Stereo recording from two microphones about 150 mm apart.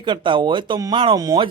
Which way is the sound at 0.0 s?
35° right (ahead or behind).